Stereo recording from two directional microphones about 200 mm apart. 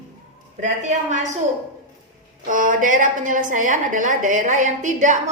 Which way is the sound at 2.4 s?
40° right (ahead or behind).